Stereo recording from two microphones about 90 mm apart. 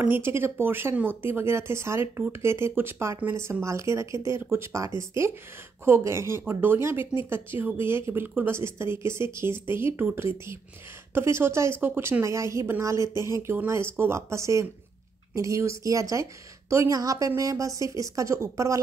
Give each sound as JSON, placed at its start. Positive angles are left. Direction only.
{"t": 0.0, "sound": "a woman's voice", "side_deg": -25}